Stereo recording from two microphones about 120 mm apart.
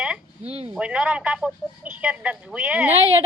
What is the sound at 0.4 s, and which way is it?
Speech, 60° right (ahead or behind).